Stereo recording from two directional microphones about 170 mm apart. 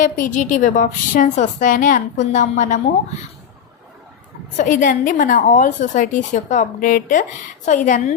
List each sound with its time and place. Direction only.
0.0 s a woman's voice: 50° left (ahead or behind)
4.5 s a woman's voice: 50° left (ahead or behind)